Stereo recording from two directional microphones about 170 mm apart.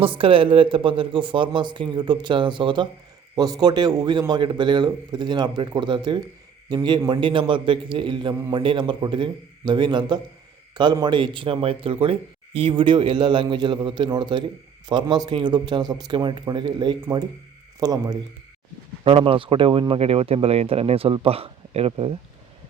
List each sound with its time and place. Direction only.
0.0 s a man's voice: 30° right (ahead or behind)
19.0 s speech: 30° right (ahead or behind)